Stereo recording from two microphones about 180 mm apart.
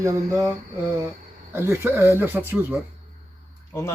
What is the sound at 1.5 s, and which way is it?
Speech, 15° right (ahead or behind).